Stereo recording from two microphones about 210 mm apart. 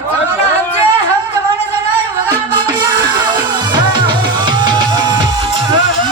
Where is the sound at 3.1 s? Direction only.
20° right (ahead or behind).